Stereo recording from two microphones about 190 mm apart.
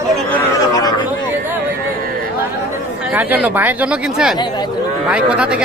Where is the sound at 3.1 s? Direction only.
10° right (ahead or behind).